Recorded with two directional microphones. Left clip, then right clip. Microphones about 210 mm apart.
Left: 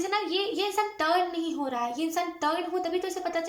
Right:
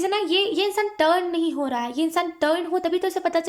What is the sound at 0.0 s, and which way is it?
A woman's voice, 40° right (ahead or behind).